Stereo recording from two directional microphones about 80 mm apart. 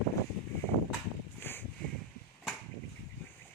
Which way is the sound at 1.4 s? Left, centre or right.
Left.